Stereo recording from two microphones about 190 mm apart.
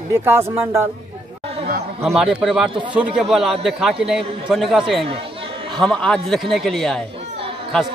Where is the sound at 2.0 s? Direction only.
Centre (ahead or behind).